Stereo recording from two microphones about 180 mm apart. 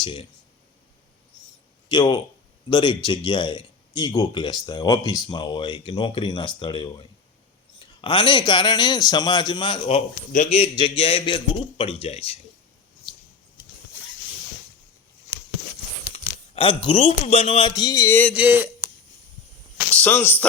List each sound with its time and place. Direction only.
0.0 s speech: 30° left (ahead or behind)
1.9 s speech: 25° left (ahead or behind)
10.3 s a man's voice: 40° left (ahead or behind)
16.1 s speech: 30° left (ahead or behind); by 18.3 s 10° left (ahead or behind)
18.3 s speech: 10° right (ahead or behind)
19.9 s speech: 10° left (ahead or behind)